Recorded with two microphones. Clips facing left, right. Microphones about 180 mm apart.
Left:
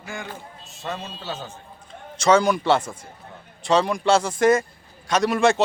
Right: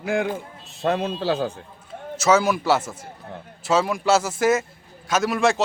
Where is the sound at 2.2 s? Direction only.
5° right (ahead or behind).